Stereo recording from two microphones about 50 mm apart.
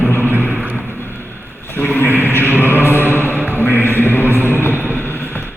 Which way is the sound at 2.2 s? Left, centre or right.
Left.